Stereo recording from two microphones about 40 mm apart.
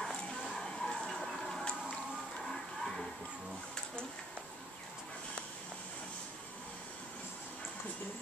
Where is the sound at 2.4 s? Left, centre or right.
Centre.